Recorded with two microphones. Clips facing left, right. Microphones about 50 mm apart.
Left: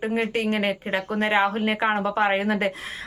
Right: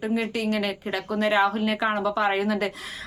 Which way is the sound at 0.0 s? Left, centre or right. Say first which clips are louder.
Left 2 dB; left.